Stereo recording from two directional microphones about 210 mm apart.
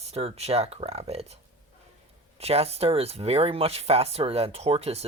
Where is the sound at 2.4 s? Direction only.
30° right (ahead or behind).